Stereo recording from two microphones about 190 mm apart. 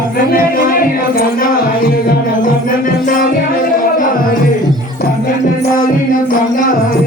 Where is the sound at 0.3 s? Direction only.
50° left (ahead or behind).